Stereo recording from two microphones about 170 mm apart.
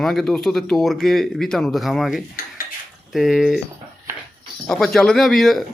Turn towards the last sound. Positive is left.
turn(degrees=0)  # may be behind; listen again after turning